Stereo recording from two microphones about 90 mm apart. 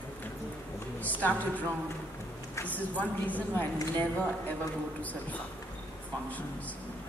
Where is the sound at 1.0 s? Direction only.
20° left (ahead or behind).